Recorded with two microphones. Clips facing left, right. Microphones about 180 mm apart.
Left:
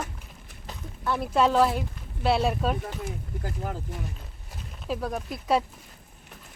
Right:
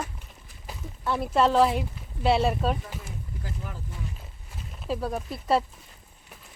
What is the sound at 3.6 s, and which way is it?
Speech, 50° left (ahead or behind).